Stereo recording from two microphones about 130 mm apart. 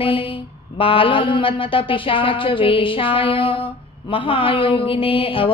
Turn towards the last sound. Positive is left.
turn(degrees=45)  # may be behind; listen again after turning